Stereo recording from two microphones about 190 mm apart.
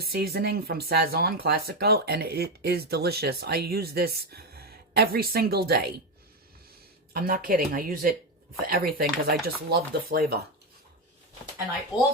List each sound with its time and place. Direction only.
0.0 s speech: 55° right (ahead or behind)
7.1 s speech: 50° right (ahead or behind)